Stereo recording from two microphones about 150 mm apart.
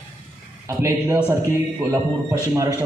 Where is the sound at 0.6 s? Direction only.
20° right (ahead or behind).